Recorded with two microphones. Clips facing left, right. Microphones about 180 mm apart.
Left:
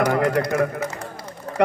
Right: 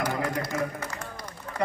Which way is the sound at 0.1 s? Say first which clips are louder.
Left 9 dB; 70° left (ahead or behind).